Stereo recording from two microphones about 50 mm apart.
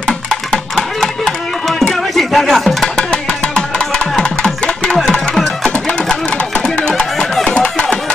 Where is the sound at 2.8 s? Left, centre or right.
Centre.